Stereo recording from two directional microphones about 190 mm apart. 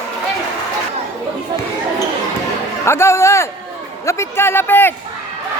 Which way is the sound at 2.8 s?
15° left (ahead or behind).